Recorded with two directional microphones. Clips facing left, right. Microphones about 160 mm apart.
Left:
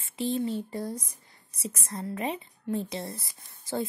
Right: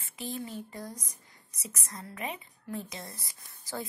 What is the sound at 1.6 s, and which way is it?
A woman's voice, 30° left (ahead or behind).